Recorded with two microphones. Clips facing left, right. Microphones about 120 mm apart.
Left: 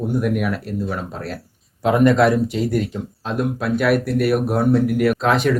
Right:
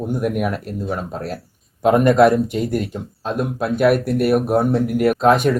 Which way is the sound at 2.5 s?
15° right (ahead or behind).